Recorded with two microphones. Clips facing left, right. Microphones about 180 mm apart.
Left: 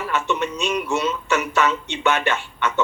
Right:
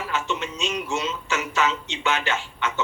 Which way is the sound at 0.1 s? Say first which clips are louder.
Left 6 dB; 60° left (ahead or behind).